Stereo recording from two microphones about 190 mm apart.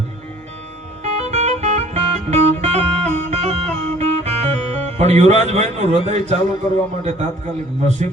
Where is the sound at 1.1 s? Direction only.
35° right (ahead or behind).